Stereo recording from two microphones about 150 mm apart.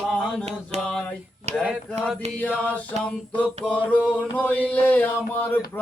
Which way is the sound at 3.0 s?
5° left (ahead or behind).